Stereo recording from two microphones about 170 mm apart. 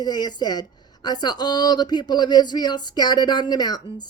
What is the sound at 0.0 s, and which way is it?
Speech, 25° left (ahead or behind).